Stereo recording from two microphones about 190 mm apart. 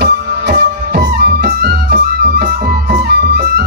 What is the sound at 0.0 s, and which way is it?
Music, 60° right (ahead or behind).